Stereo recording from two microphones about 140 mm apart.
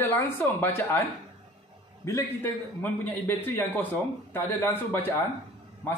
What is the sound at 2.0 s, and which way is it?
A man's voice, 15° left (ahead or behind).